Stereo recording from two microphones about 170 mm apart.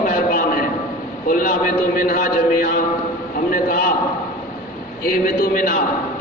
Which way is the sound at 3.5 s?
60° left (ahead or behind).